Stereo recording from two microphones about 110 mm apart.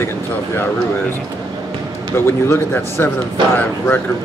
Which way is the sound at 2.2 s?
20° left (ahead or behind).